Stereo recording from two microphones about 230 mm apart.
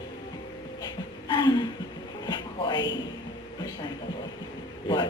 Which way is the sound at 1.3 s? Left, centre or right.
Centre.